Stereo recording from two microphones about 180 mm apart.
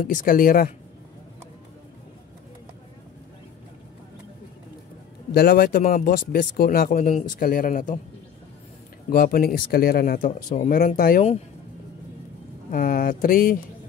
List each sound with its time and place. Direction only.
0.0 s speech: 50° left (ahead or behind)
5.3 s speech: 55° left (ahead or behind)
7.0 s speech: 40° left (ahead or behind)
9.1 s speech: 55° left (ahead or behind)
12.7 s speech: 50° left (ahead or behind)